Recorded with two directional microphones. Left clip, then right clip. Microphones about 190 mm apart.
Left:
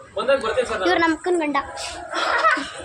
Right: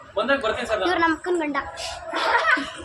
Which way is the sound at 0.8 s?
15° left (ahead or behind).